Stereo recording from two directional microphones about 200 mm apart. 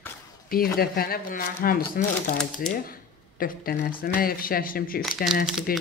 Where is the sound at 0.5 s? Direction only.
50° left (ahead or behind).